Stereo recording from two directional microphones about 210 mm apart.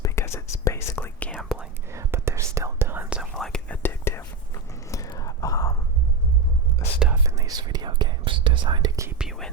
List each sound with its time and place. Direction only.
0.0 s whispering: 15° left (ahead or behind)
1.9 s whispering: 10° right (ahead or behind); by 5.7 s 15° left (ahead or behind)
7.0 s whispering: 10° right (ahead or behind)
9.0 s whispering: 5° right (ahead or behind)